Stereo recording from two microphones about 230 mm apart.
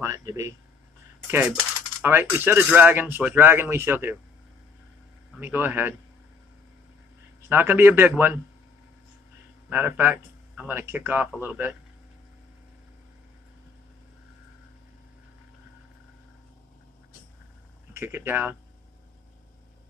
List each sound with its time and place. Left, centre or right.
0.0 s coin: centre
5.4 s coin: centre
7.4 s coin: centre
9.7 s coin: centre
17.9 s coin: centre